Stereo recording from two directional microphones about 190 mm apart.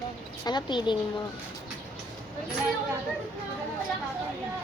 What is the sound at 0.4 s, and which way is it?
Speech, 25° left (ahead or behind).